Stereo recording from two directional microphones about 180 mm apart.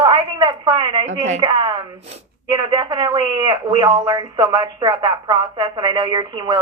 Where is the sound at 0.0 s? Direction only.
25° right (ahead or behind).